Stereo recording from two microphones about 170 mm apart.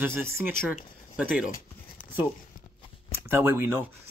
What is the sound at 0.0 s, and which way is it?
Speech, 15° right (ahead or behind).